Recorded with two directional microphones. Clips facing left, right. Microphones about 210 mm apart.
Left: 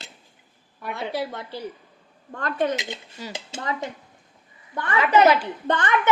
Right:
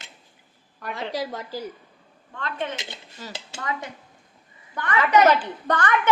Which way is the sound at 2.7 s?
15° left (ahead or behind).